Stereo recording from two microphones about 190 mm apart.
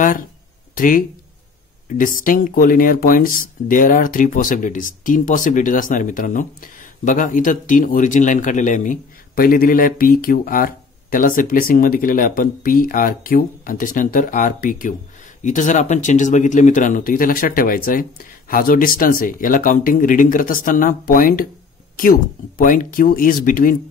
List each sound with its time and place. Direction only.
0.0 s speech: 45° left (ahead or behind)